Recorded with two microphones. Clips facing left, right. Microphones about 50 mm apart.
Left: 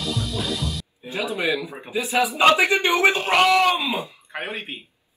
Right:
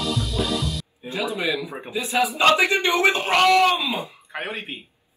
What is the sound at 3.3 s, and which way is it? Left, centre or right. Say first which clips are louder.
Speech: right 2 dB; centre.